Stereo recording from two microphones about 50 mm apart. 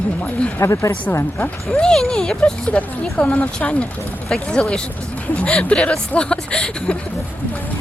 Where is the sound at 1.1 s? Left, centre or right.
Left.